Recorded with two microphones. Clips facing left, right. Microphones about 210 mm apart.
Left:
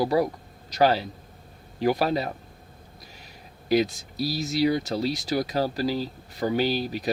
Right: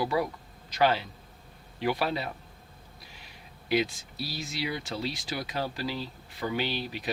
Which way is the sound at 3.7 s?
40° left (ahead or behind).